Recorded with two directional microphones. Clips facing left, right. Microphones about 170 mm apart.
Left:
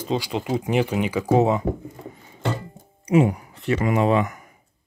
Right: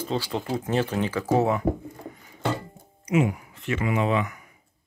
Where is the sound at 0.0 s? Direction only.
15° left (ahead or behind).